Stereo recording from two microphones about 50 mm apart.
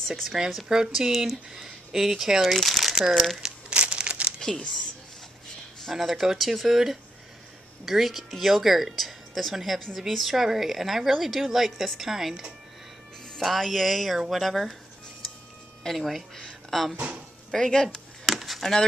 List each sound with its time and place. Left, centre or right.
0.1 s speech: centre
3.4 s crumpling: right
4.4 s speech: centre
5.9 s a woman's voice: centre
13.4 s a woman's voice: centre
16.0 s a woman's voice: centre
16.3 s speech: centre
16.9 s speech: right
17.5 s speech: centre
17.8 s a sound: centre